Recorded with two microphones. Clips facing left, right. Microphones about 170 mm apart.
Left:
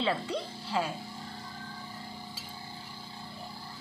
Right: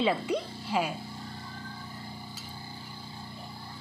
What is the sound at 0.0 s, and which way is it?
Speech, 15° right (ahead or behind).